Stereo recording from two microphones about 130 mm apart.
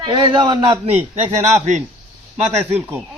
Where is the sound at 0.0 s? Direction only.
35° right (ahead or behind).